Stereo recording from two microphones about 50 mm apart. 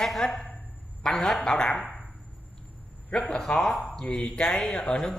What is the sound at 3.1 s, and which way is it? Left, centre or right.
Speech, left.